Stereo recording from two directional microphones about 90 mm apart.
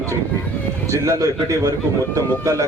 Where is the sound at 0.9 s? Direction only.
35° right (ahead or behind).